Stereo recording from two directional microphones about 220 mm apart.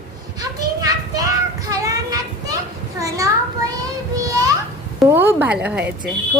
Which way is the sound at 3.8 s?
15° right (ahead or behind).